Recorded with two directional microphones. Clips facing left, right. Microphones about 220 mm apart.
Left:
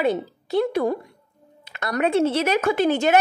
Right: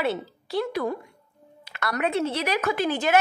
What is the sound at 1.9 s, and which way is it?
A woman's voice, 30° left (ahead or behind).